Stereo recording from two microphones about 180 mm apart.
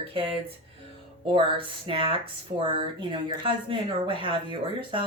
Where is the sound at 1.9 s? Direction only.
30° right (ahead or behind).